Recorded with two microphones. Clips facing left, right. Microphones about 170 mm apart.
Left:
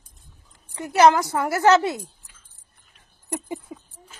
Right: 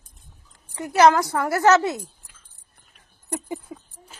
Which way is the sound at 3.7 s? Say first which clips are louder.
Even; 20° left (ahead or behind).